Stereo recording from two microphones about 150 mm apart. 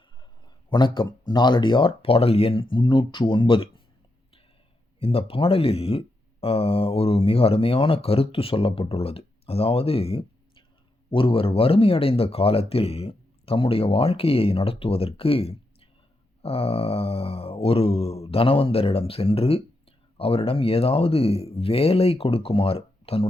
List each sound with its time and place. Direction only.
0.7 s speech: 30° left (ahead or behind)
4.9 s speech: 40° left (ahead or behind)